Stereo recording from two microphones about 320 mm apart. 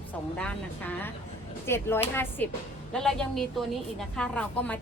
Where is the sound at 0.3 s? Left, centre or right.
Centre.